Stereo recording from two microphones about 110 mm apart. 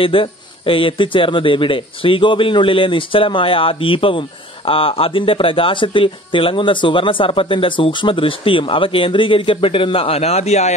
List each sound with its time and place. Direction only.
0.0 s speech: 55° left (ahead or behind); by 10.7 s 85° left